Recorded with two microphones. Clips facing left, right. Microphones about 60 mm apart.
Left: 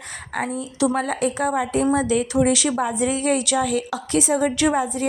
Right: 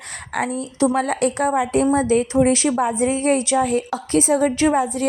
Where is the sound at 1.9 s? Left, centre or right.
Right.